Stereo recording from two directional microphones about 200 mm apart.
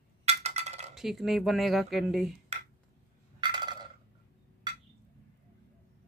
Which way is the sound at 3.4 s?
20° right (ahead or behind).